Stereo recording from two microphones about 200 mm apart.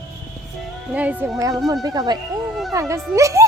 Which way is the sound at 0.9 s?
5° right (ahead or behind).